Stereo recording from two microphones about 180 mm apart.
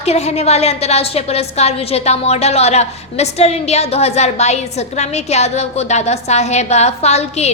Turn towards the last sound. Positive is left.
turn(degrees=35)  # may be behind; listen again after turning